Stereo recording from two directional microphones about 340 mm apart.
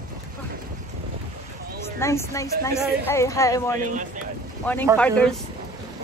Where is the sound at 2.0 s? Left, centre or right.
Centre.